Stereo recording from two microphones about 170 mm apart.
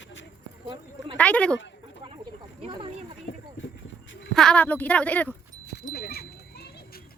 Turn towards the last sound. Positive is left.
turn(degrees=65)  # may be behind; listen again after turning